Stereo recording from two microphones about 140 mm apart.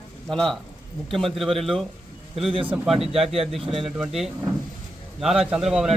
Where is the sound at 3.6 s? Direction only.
40° right (ahead or behind).